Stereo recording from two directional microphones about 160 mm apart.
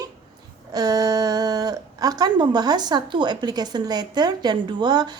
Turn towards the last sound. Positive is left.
turn(degrees=-25)  # may be behind; listen again after turning